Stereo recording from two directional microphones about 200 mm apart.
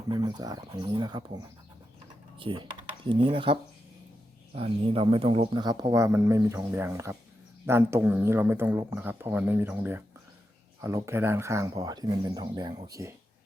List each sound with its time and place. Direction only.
0.1 s speech: 20° right (ahead or behind)
2.4 s speech: 25° right (ahead or behind)